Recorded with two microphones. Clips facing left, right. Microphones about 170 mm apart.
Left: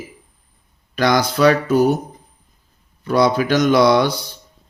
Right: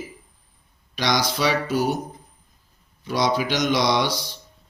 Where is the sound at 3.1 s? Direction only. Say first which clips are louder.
Left 7 dB; 55° left (ahead or behind).